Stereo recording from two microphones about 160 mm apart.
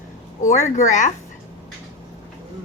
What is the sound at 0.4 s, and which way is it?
Speech, 50° left (ahead or behind).